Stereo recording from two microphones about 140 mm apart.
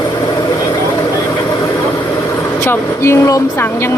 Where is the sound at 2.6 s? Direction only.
20° left (ahead or behind).